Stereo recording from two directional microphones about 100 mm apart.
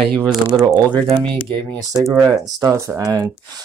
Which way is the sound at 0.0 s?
5° left (ahead or behind).